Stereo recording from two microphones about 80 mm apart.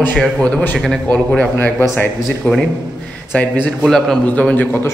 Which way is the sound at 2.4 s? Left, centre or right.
Centre.